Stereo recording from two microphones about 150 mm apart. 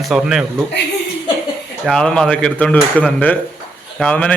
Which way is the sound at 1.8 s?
5° left (ahead or behind).